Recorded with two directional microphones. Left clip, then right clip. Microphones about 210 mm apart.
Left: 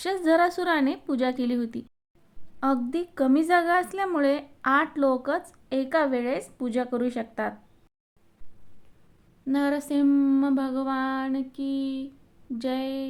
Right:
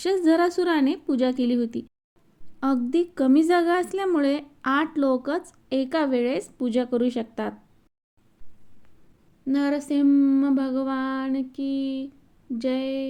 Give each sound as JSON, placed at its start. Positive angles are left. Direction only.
{"t": 0.0, "sound": "a woman's voice", "side_deg": -5}
{"t": 9.5, "sound": "speech", "side_deg": -10}